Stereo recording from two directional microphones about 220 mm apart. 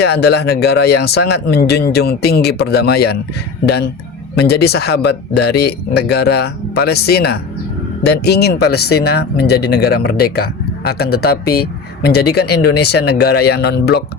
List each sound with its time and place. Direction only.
0.0 s speech: 45° left (ahead or behind)